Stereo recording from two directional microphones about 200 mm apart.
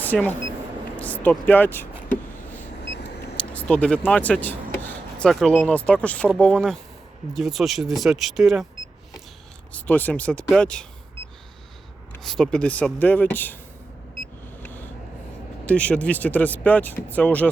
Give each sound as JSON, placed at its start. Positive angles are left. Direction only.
{"t": 0.0, "sound": "speech", "side_deg": 10}
{"t": 3.3, "sound": "speech", "side_deg": 5}
{"t": 9.7, "sound": "speech", "side_deg": 10}
{"t": 12.2, "sound": "speech", "side_deg": 0}
{"t": 14.6, "sound": "a sound", "side_deg": 10}
{"t": 15.6, "sound": "speech", "side_deg": 5}